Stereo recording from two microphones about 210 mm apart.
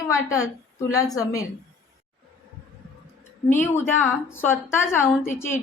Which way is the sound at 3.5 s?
10° left (ahead or behind).